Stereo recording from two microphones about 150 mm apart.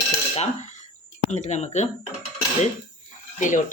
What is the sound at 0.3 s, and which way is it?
Speech, 50° left (ahead or behind).